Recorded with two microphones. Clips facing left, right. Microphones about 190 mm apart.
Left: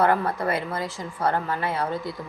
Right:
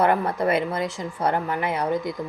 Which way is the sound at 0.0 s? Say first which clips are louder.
Right 1 dB; 20° right (ahead or behind).